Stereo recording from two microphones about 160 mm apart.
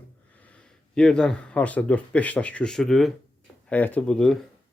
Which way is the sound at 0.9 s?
5° left (ahead or behind).